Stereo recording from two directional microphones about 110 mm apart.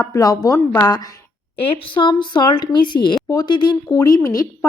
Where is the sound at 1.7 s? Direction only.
50° left (ahead or behind); by 4.7 s 30° left (ahead or behind).